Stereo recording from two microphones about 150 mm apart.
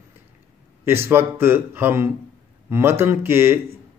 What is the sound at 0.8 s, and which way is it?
Speech, 15° right (ahead or behind).